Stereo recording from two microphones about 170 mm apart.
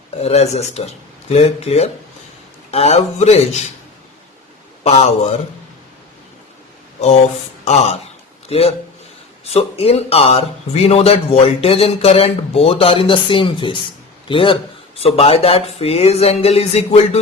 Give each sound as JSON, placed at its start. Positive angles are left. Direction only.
{"t": 0.2, "sound": "speech", "side_deg": 40}
{"t": 4.8, "sound": "speech", "side_deg": 40}
{"t": 7.6, "sound": "speech", "side_deg": 40}